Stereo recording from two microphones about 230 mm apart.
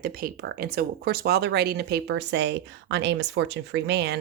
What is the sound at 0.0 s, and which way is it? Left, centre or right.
Speech, right.